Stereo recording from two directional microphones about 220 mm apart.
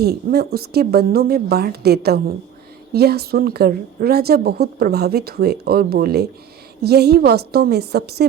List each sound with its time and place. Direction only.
0.0 s a woman's voice: 45° right (ahead or behind)